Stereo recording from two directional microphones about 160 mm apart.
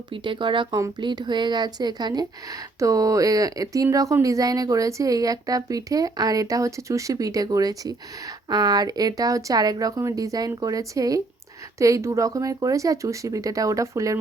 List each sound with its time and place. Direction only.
0.1 s speech: 30° right (ahead or behind)